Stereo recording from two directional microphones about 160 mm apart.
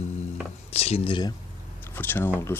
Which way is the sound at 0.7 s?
40° left (ahead or behind).